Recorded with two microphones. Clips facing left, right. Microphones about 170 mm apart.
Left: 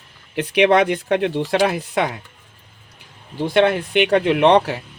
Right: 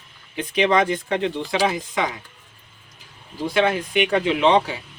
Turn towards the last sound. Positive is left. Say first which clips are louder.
# left 4 dB
turn(degrees=70)  # may be behind; listen again after turning